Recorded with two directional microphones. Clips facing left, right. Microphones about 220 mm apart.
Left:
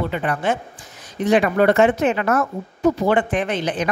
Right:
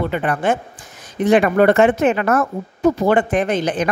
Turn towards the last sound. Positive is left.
turn(degrees=-45)  # may be behind; listen again after turning